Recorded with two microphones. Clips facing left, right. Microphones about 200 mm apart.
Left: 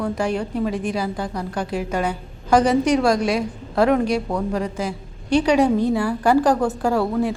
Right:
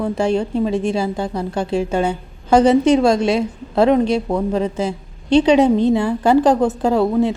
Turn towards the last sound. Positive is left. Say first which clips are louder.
# right 4 dB
turn(degrees=-20)  # may be behind; listen again after turning